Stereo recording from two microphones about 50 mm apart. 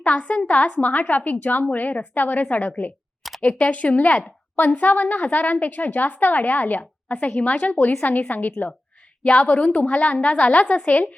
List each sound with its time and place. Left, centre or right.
0.0 s a woman's voice: left